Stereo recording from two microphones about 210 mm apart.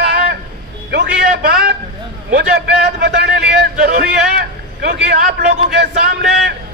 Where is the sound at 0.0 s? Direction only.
55° right (ahead or behind).